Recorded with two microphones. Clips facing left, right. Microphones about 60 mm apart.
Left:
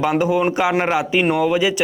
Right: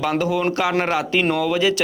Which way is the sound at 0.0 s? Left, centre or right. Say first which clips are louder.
Left 3 dB; left.